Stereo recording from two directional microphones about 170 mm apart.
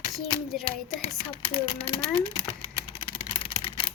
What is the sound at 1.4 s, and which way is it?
Speech, 30° left (ahead or behind).